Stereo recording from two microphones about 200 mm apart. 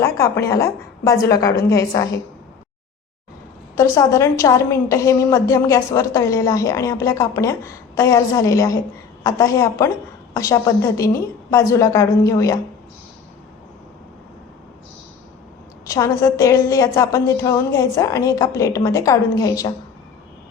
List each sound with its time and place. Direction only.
0.0 s a woman's voice: 15° left (ahead or behind)
3.8 s a woman's voice: 15° left (ahead or behind)
15.9 s a woman's voice: 15° left (ahead or behind)